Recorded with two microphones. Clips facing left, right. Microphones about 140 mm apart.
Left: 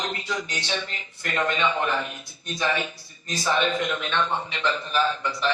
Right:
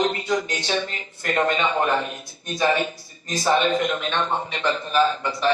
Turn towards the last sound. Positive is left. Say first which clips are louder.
# right 4 dB
turn(degrees=-50)  # may be behind; listen again after turning